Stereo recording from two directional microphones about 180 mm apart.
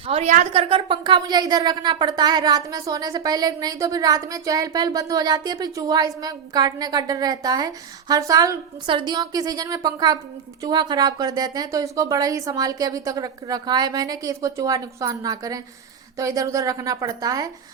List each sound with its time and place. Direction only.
0.1 s a woman's voice: 40° right (ahead or behind); by 17.5 s 20° right (ahead or behind)